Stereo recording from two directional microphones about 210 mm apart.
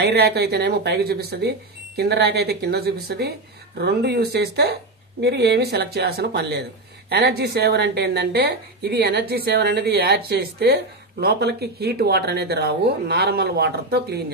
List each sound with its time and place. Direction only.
0.0 s a woman's voice: 50° right (ahead or behind)